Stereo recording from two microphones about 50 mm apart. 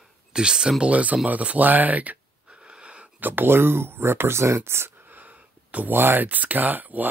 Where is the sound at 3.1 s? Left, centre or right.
Right.